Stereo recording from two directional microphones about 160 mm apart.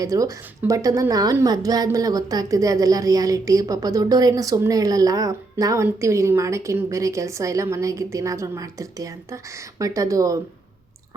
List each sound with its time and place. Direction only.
0.0 s a woman's voice: 20° right (ahead or behind)